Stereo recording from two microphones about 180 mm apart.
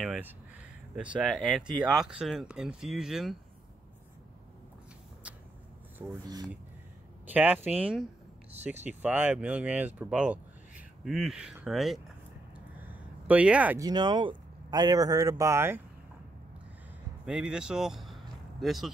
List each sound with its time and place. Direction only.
0.0 s a sound: 5° right (ahead or behind)
0.9 s speech: 5° right (ahead or behind)
6.2 s a man's voice: 20° right (ahead or behind)
7.2 s speech: 10° right (ahead or behind)
12.5 s a sound: 10° right (ahead or behind)
13.7 s a man's voice: 20° right (ahead or behind)
17.3 s speech: 5° right (ahead or behind)